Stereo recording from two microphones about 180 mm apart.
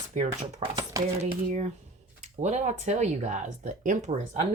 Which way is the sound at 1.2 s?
40° right (ahead or behind).